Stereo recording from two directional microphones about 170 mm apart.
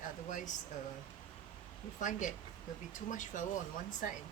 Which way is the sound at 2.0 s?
50° left (ahead or behind).